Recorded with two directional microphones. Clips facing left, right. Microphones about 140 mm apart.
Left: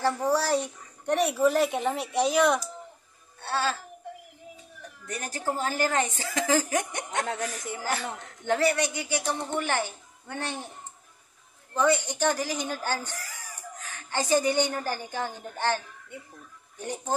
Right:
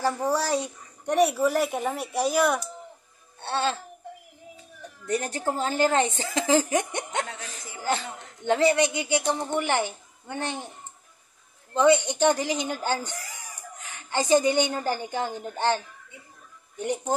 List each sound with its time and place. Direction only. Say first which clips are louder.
0.0 s speech: even; 15° right (ahead or behind)
3.3 s a woman's voice: right 2 dB; 25° right (ahead or behind)
5.0 s a woman's voice: right 5 dB; 25° right (ahead or behind)
8.5 s a woman's voice: right 4 dB; 20° right (ahead or behind)
11.7 s speech: right 5 dB; 20° right (ahead or behind)